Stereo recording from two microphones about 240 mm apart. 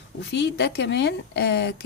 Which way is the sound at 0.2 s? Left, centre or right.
Left.